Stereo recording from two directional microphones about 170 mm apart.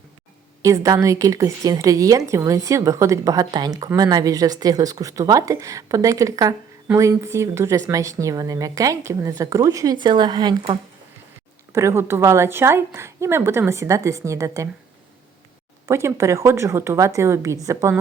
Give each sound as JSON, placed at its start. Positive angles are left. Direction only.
{"t": 0.6, "sound": "speech", "side_deg": -20}
{"t": 11.7, "sound": "a woman's voice", "side_deg": -15}
{"t": 15.9, "sound": "a woman's voice", "side_deg": -15}